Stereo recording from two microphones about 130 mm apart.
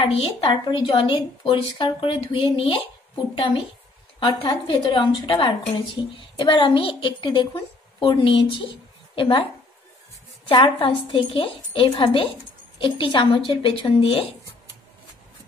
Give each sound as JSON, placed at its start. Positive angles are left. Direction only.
{"t": 0.0, "sound": "a woman's voice", "side_deg": 45}
{"t": 4.2, "sound": "a woman's voice", "side_deg": 35}
{"t": 10.5, "sound": "a woman's voice", "side_deg": 40}